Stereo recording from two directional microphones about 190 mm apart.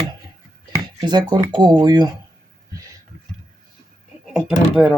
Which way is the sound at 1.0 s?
25° right (ahead or behind).